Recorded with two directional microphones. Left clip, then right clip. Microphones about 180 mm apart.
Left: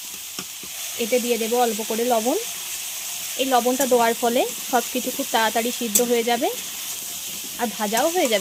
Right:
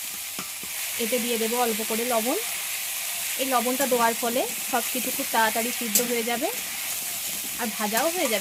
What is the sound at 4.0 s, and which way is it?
Frying, 35° left (ahead or behind).